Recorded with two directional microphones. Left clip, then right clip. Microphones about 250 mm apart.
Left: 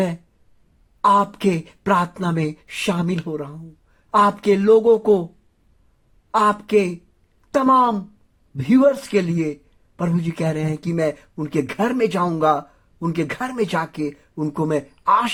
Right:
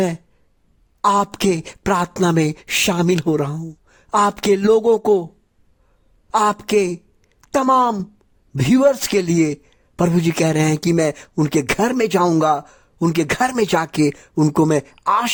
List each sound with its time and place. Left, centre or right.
1.0 s a man's voice: right
6.3 s a man's voice: right